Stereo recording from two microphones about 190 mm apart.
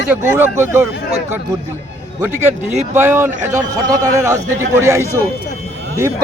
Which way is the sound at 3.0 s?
10° right (ahead or behind).